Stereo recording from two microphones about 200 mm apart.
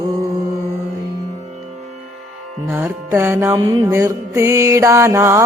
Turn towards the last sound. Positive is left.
turn(degrees=-15)  # may be behind; listen again after turning